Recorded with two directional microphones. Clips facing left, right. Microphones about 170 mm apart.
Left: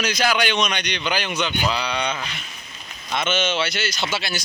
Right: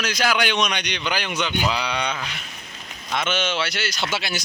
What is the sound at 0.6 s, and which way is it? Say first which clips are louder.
A man's voice: left 1 dB; centre (ahead or behind).